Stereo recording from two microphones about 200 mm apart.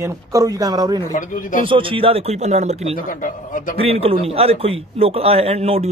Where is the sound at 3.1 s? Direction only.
40° left (ahead or behind).